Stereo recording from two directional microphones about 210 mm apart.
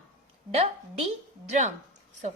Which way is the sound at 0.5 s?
30° right (ahead or behind).